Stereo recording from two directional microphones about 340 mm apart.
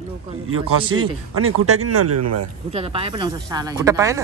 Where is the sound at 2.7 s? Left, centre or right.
Centre.